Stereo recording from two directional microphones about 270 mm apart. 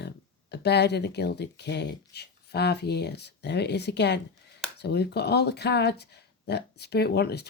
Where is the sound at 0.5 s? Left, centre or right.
Left.